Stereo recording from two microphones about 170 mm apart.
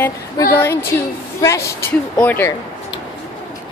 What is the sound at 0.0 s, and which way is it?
Speech, 15° left (ahead or behind).